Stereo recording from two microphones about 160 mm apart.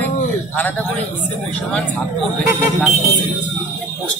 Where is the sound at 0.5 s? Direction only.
10° left (ahead or behind).